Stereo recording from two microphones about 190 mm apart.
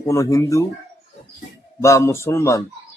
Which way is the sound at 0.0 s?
15° left (ahead or behind).